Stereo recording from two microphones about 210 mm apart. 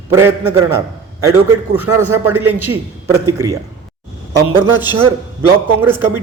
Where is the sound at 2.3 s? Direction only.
90° right.